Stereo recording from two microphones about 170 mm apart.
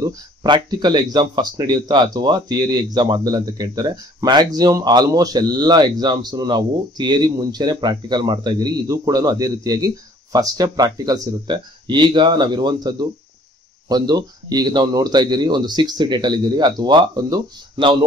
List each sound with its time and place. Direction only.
0.0 s speech: 25° right (ahead or behind)